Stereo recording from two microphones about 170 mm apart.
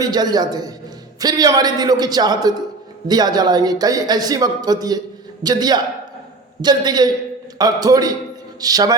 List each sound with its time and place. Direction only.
0.0 s speech: 25° right (ahead or behind)